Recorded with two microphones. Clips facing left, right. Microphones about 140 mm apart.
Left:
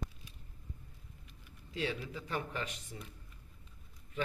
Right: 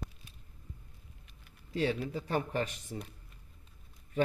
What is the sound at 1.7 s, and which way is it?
Speech, 40° right (ahead or behind).